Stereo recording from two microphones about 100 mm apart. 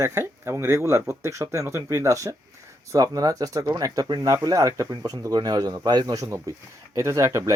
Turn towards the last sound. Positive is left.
turn(degrees=-30)  # may be behind; listen again after turning